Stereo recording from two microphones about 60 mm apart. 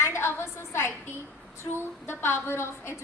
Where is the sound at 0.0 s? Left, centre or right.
Left.